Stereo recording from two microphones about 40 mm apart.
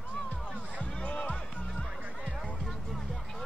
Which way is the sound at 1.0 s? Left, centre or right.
Left.